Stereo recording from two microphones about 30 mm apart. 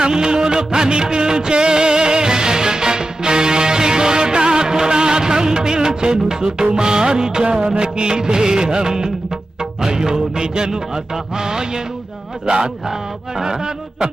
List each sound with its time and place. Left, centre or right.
0.1 s music of bollywood: right
13.3 s music of bollywood: centre